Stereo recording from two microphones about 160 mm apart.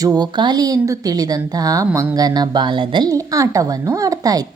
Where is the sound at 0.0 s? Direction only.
25° right (ahead or behind).